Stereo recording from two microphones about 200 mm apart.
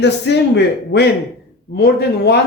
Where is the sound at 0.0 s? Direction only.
60° left (ahead or behind).